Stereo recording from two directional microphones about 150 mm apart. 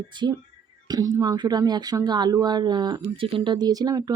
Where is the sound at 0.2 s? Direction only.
30° right (ahead or behind).